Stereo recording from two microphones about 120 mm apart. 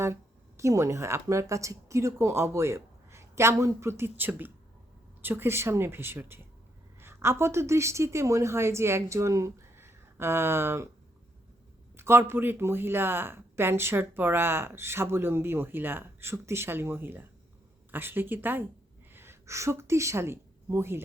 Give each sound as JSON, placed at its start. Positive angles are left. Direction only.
{"t": 0.0, "sound": "a woman's voice", "side_deg": -25}
{"t": 11.9, "sound": "a woman's voice", "side_deg": -20}